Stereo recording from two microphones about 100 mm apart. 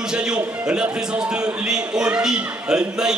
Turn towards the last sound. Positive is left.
turn(degrees=-5)  # may be behind; listen again after turning